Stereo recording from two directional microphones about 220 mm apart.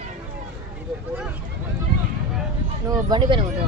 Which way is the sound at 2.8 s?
15° right (ahead or behind).